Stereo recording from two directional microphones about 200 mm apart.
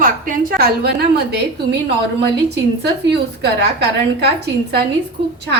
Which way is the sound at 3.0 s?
55° right (ahead or behind).